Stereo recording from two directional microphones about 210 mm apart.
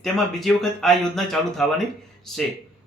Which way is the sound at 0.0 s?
Centre (ahead or behind).